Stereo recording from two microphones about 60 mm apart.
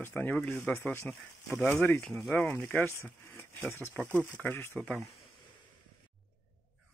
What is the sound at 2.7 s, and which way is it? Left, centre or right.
Speech, left.